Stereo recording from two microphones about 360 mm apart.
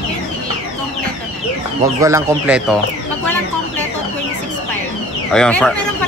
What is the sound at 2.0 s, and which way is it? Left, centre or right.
Speech, centre.